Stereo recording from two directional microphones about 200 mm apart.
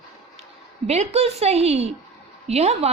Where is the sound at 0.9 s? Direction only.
35° right (ahead or behind).